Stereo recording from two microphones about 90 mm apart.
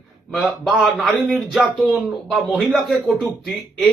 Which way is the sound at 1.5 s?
5° right (ahead or behind).